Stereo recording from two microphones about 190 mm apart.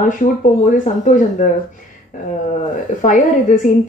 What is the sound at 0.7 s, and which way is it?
Speech, 40° left (ahead or behind).